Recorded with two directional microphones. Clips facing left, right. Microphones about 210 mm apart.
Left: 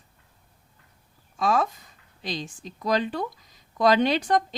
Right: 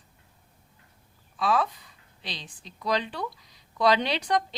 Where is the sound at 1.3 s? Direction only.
45° left (ahead or behind).